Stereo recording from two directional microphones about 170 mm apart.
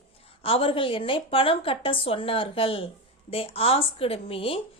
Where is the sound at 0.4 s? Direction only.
35° left (ahead or behind).